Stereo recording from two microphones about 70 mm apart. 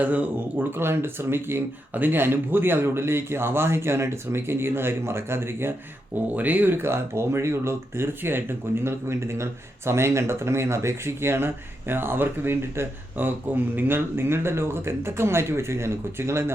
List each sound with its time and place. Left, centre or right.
0.0 s speech: right
0.8 s speech: right
6.1 s speech: right